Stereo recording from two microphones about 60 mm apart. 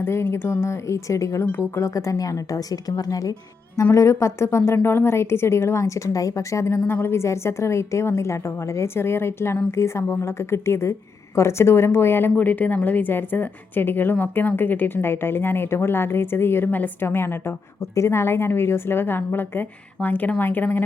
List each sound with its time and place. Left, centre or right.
0.0 s a woman's voice: left
3.9 s a woman's voice: left
7.2 s a woman's voice: left